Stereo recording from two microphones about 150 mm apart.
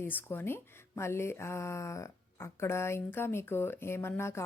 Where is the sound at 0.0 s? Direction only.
15° left (ahead or behind).